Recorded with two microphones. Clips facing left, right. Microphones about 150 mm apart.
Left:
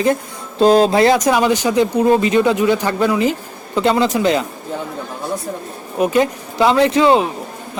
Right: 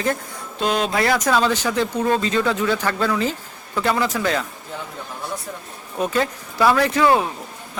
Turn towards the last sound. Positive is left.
turn(degrees=20)  # may be behind; listen again after turning